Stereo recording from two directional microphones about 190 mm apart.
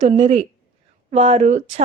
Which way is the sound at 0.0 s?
35° right (ahead or behind).